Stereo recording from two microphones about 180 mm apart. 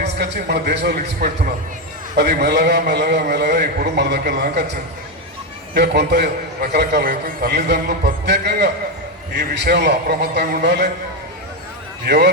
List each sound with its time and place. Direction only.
0.2 s a man's voice: 65° right (ahead or behind)
5.7 s a man's voice: 65° right (ahead or behind)
12.0 s a man's voice: 65° right (ahead or behind)